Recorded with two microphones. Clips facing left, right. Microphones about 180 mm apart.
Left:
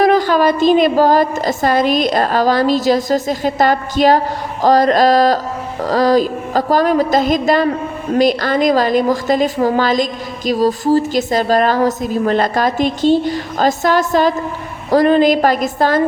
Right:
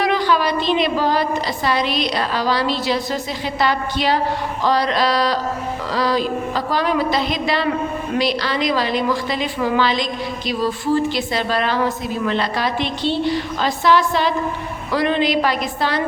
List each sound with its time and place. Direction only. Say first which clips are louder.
0.0 s music: left 6 dB; 45° left (ahead or behind)